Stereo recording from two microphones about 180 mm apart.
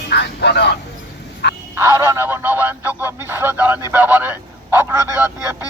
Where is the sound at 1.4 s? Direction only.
70° left (ahead or behind).